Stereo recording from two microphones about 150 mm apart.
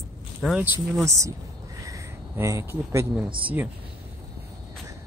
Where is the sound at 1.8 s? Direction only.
20° right (ahead or behind).